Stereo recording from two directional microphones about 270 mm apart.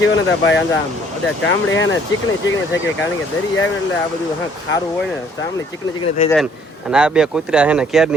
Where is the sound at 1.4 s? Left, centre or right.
Left.